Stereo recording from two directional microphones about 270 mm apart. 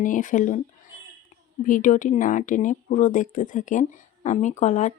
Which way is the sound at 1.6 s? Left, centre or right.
Left.